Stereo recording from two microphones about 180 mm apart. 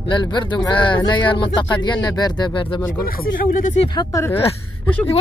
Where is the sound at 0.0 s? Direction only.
25° left (ahead or behind).